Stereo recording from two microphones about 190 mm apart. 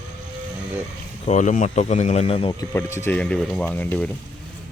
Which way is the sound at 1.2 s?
40° left (ahead or behind).